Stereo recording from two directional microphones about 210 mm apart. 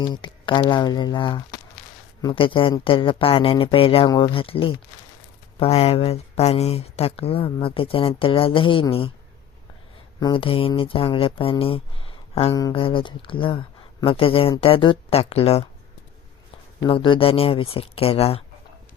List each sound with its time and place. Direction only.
0.0 s speech: 20° left (ahead or behind)
10.2 s speech: 20° left (ahead or behind)
16.8 s speech: 25° left (ahead or behind)